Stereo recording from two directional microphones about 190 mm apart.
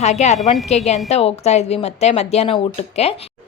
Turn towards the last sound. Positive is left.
turn(degrees=35)  # may be behind; listen again after turning